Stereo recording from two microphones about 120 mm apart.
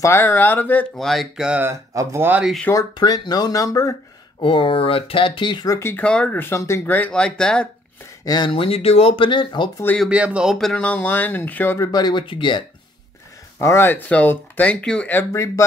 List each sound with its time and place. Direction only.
0.0 s speech: 20° left (ahead or behind)
0.9 s speech: centre (ahead or behind)
1.6 s speech: 20° right (ahead or behind)
2.7 s speech: 35° left (ahead or behind)
4.4 s speech: 45° left (ahead or behind)
5.8 s speech: 20° left (ahead or behind)
6.0 s speech: 10° left (ahead or behind)
8.3 s speech: 40° left (ahead or behind)
10.0 s speech: 10° right (ahead or behind); by 11.9 s 20° left (ahead or behind)
11.9 s speech: 35° left (ahead or behind)
13.6 s speech: 20° left (ahead or behind)